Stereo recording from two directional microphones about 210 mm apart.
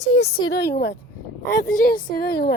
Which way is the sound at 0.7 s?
55° left (ahead or behind).